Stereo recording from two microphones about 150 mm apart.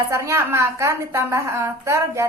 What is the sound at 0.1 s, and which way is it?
A woman's voice, 20° right (ahead or behind).